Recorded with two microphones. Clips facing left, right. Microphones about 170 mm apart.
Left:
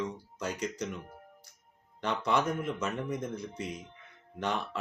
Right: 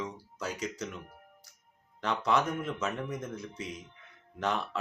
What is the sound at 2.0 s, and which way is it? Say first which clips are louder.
Speech: right 1 dB; centre (ahead or behind).